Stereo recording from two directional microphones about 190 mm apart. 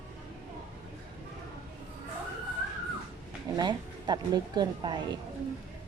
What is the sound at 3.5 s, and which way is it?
Speech, 20° right (ahead or behind).